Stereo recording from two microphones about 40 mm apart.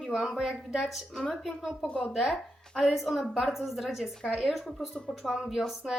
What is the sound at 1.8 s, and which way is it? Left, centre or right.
Speech, left.